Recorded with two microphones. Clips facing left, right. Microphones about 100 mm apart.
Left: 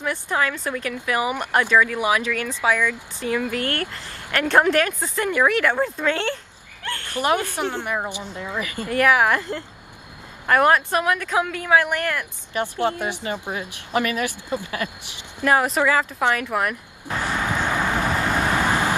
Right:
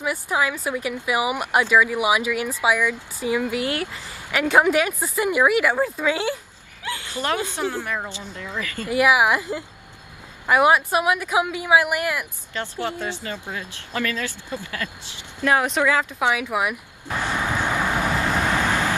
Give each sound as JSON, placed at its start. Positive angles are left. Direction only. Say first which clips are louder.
{"t": 0.0, "sound": "speech", "louder": "even", "side_deg": -10}
{"t": 7.2, "sound": "speech", "louder": "left 3 dB", "side_deg": 15}
{"t": 8.8, "sound": "speech", "louder": "even", "side_deg": -10}
{"t": 12.6, "sound": "speech", "louder": "left 5 dB", "side_deg": 15}
{"t": 15.4, "sound": "speech", "louder": "left 1 dB", "side_deg": 0}
{"t": 17.6, "sound": "vehicle", "louder": "even", "side_deg": 10}